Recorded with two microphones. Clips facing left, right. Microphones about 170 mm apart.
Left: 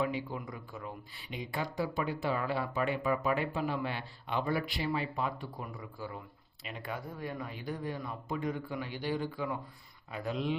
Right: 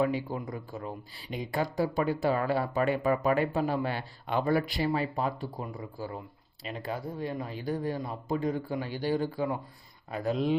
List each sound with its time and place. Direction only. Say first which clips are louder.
0.0 s speech: right 5 dB; 40° right (ahead or behind)